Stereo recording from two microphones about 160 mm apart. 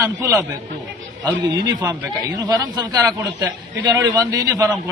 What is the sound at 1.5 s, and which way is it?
A man's voice, 25° right (ahead or behind).